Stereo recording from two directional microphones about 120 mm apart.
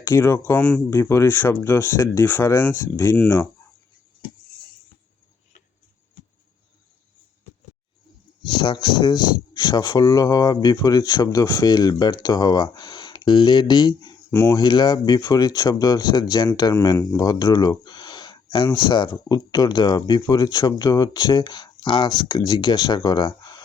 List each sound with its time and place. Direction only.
0.0 s speech: 20° left (ahead or behind)
8.4 s speech: 45° left (ahead or behind)
14.3 s speech: 25° left (ahead or behind)
14.6 s speech: 40° left (ahead or behind)